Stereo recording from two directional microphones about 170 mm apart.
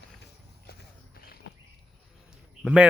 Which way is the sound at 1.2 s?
65° left (ahead or behind).